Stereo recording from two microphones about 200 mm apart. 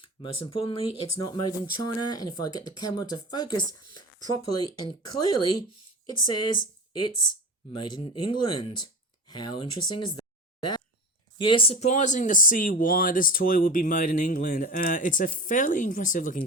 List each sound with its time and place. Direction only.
0.2 s speech: 25° left (ahead or behind)
7.7 s speech: 20° left (ahead or behind)
11.3 s speech: 25° left (ahead or behind); by 16.4 s 40° left (ahead or behind)